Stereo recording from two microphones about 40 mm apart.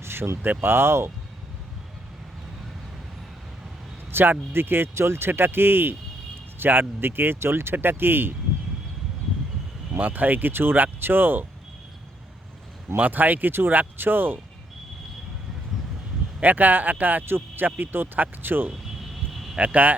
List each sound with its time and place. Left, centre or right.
0.0 s speech: right
0.6 s speech: right
4.1 s speech: right
10.0 s speech: right
13.0 s speech: right
16.4 s speech: right
17.2 s speech: right
19.5 s speech: right